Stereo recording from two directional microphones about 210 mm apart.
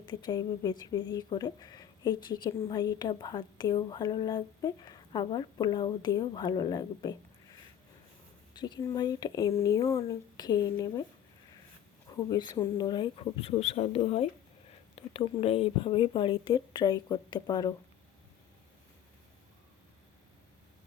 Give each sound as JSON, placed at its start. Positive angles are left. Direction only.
{"t": 0.0, "sound": "speech", "side_deg": 20}
{"t": 8.5, "sound": "speech", "side_deg": 20}
{"t": 12.1, "sound": "speech", "side_deg": 20}